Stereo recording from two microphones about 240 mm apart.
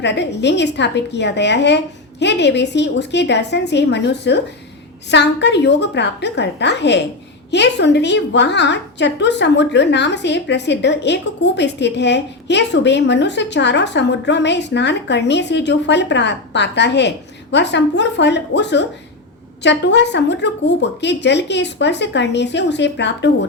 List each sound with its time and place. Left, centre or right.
0.0 s a woman's voice: left